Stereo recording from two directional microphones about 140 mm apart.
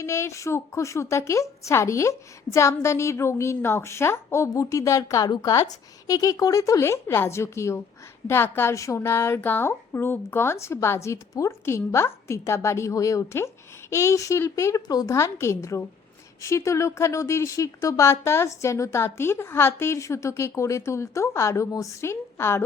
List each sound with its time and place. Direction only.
0.0 s a woman's voice: 20° left (ahead or behind)